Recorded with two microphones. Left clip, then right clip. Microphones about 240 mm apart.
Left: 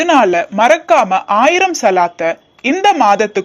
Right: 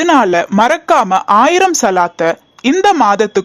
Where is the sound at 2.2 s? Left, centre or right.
Right.